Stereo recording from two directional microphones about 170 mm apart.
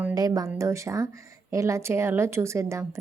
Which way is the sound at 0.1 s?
20° right (ahead or behind).